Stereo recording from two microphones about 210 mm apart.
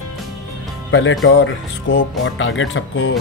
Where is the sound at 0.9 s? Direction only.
65° left (ahead or behind).